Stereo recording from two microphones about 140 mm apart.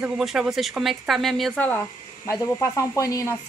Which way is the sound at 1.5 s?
10° left (ahead or behind).